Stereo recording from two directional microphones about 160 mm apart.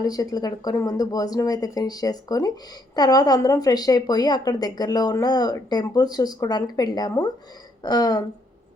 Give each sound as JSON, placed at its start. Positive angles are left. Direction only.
{"t": 0.0, "sound": "a woman's voice", "side_deg": 25}